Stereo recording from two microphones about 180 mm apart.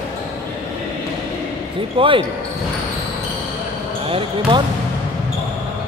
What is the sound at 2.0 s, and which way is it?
Speech, 30° right (ahead or behind).